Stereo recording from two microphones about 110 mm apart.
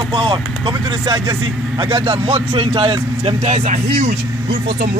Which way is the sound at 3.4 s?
85° right.